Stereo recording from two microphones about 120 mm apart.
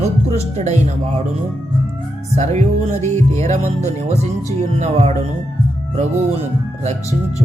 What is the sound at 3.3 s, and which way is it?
Speech, 85° right.